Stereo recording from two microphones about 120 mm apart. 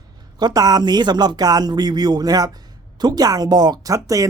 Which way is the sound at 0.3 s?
35° right (ahead or behind).